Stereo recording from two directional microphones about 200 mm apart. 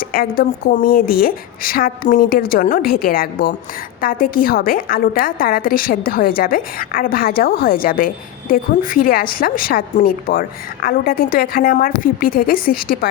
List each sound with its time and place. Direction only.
0.0 s a woman's voice: 45° left (ahead or behind)